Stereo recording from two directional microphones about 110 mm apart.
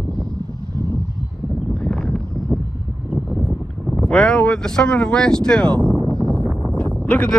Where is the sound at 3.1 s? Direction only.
15° right (ahead or behind).